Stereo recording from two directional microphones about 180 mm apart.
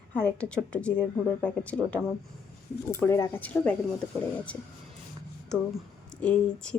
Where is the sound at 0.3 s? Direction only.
5° left (ahead or behind).